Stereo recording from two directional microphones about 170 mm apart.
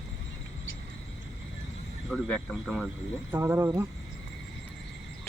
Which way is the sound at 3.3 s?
15° right (ahead or behind).